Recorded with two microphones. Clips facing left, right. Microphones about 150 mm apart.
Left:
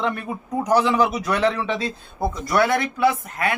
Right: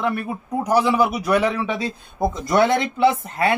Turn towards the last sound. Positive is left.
turn(degrees=-30)  # may be behind; listen again after turning